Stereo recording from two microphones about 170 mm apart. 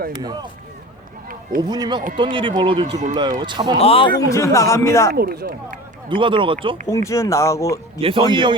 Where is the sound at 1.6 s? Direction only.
25° right (ahead or behind).